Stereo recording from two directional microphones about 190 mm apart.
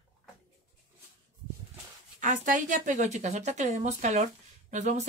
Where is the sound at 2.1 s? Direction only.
40° right (ahead or behind).